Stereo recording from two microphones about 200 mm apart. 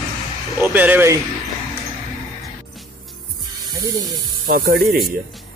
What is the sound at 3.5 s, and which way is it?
Snake, 20° right (ahead or behind).